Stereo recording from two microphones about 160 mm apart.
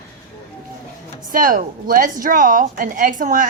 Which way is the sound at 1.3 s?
60° right (ahead or behind).